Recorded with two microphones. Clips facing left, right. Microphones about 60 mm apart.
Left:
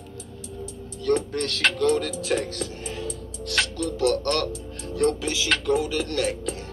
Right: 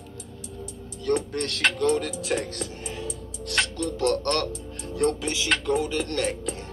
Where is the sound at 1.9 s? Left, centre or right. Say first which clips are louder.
Left 2 dB; right.